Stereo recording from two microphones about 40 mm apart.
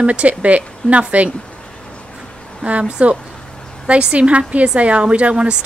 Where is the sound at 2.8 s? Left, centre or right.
Right.